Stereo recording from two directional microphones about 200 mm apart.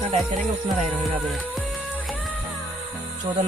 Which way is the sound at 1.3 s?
5° left (ahead or behind).